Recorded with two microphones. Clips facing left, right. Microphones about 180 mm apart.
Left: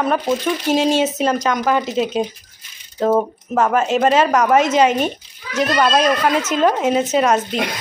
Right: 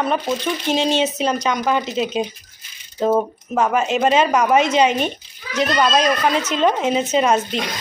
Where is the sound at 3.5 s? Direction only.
5° right (ahead or behind).